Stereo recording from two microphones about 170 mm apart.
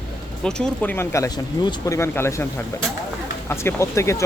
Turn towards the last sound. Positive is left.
turn(degrees=15)  # may be behind; listen again after turning